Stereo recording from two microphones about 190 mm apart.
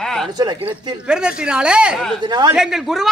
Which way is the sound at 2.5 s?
Centre (ahead or behind).